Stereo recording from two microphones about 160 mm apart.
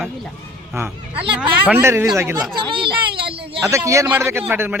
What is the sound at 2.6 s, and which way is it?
Speech, 30° right (ahead or behind).